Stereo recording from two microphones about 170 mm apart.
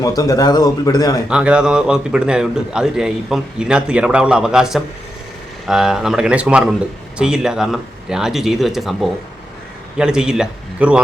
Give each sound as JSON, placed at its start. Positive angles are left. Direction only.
{"t": 0.2, "sound": "speech", "side_deg": 20}
{"t": 1.3, "sound": "a man's voice", "side_deg": -5}